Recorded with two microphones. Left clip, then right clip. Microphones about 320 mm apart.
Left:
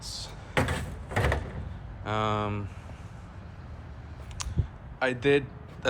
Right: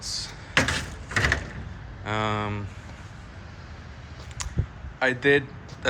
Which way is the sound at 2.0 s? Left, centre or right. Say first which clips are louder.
Right 1 dB; centre.